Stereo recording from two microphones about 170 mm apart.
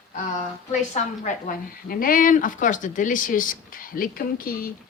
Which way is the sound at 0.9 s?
50° left (ahead or behind).